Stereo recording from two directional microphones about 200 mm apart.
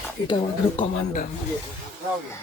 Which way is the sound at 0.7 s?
40° left (ahead or behind).